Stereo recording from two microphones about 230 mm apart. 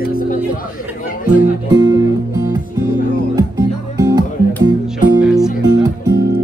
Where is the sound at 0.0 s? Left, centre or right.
Left.